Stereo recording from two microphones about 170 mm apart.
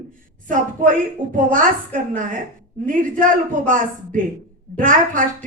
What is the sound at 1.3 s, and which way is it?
Speech, 50° right (ahead or behind).